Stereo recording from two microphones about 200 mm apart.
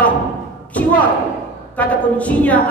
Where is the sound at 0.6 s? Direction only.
5° left (ahead or behind).